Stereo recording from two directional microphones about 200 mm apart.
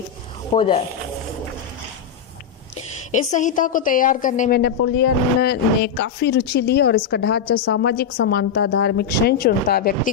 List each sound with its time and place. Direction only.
0.6 s speech: 25° left (ahead or behind)
3.1 s a woman's voice: 40° left (ahead or behind)
4.6 s a woman's voice: 55° left (ahead or behind)